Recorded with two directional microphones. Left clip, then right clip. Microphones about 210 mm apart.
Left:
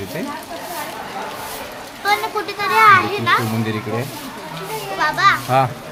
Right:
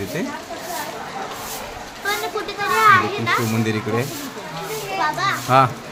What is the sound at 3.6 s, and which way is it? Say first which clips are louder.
Speech: right 1 dB; 10° right (ahead or behind).